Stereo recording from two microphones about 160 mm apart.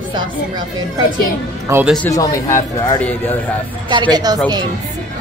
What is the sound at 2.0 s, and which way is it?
Speech, 20° left (ahead or behind).